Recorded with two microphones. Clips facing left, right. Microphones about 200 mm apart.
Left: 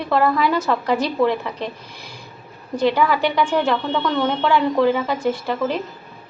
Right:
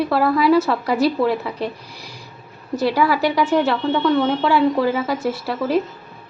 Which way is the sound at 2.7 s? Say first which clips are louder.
Even; 5° right (ahead or behind).